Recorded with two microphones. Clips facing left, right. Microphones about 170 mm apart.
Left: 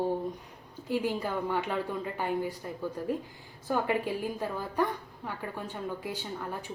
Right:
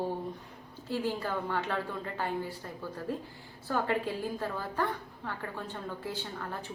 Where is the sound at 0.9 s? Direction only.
15° left (ahead or behind).